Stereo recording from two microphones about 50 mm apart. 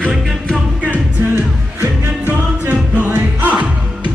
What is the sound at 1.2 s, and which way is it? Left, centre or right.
Music, right.